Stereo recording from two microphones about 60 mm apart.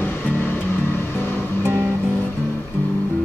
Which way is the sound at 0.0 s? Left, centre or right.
Left.